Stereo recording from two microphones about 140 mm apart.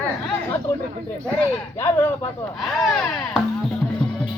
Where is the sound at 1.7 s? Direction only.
20° left (ahead or behind).